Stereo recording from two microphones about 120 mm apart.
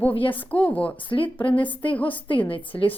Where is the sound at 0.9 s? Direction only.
45° left (ahead or behind).